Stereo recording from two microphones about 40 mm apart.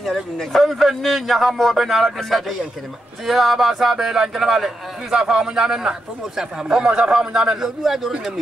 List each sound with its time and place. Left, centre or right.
0.0 s a man's voice: centre